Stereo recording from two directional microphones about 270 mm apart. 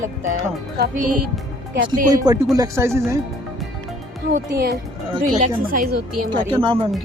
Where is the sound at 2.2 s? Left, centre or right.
Centre.